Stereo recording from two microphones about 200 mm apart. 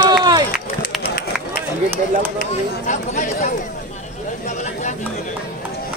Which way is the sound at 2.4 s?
35° left (ahead or behind).